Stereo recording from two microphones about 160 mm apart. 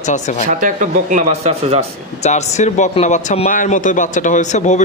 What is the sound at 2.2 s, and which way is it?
Speech, 45° left (ahead or behind).